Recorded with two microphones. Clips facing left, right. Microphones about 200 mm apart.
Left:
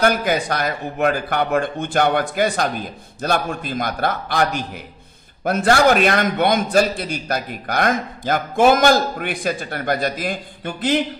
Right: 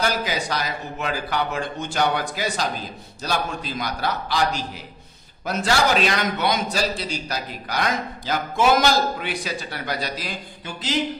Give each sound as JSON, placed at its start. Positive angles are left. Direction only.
{"t": 0.0, "sound": "a man's voice", "side_deg": 55}